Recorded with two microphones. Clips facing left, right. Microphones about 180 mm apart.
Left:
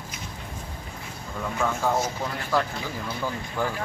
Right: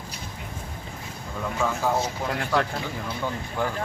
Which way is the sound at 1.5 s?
5° right (ahead or behind).